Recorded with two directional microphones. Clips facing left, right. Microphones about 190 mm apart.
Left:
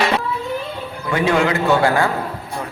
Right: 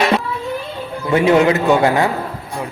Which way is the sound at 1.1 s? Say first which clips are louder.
Right 5 dB; 25° right (ahead or behind).